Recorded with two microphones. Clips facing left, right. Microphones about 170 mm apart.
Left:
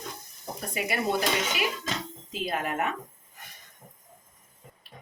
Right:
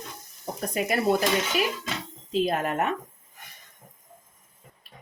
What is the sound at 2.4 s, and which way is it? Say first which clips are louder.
Speech: right 4 dB; 40° right (ahead or behind).